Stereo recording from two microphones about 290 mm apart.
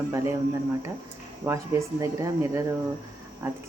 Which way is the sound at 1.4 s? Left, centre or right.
Centre.